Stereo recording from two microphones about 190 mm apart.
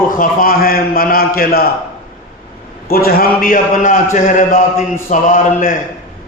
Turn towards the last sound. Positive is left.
turn(degrees=45)  # may be behind; listen again after turning